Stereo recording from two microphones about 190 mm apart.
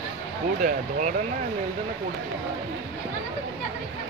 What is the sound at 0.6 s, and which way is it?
Speech, 40° right (ahead or behind).